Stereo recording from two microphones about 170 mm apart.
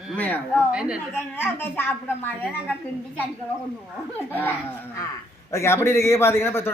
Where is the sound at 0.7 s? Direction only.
5° right (ahead or behind).